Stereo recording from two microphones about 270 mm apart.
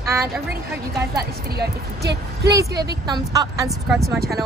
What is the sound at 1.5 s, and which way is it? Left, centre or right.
Speech, right.